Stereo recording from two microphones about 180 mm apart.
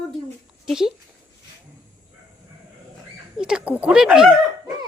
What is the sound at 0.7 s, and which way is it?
Speech, 5° right (ahead or behind).